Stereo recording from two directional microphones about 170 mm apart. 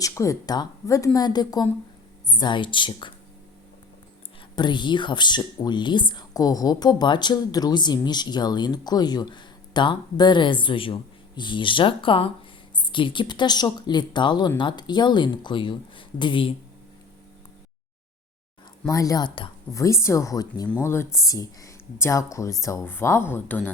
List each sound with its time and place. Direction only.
0.0 s speech: 20° left (ahead or behind)
4.5 s speech: 25° left (ahead or behind)
18.9 s speech: 20° left (ahead or behind)